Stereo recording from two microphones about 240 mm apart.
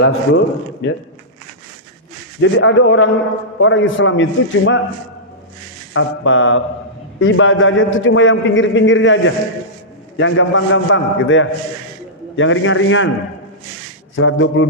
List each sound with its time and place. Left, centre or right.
0.0 s a man's voice: left
2.4 s a man's voice: left
5.9 s a man's voice: left
14.2 s a man's voice: left